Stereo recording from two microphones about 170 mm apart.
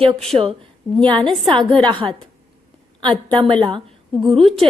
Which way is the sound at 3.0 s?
30° right (ahead or behind).